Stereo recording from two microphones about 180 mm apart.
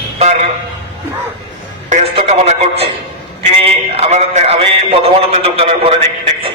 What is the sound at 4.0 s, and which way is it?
A man's voice, 40° right (ahead or behind).